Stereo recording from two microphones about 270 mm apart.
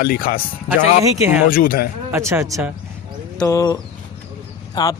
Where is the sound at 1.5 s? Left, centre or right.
Left.